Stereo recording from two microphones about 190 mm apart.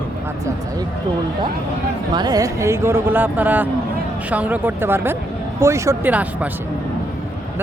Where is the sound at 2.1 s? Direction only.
20° right (ahead or behind).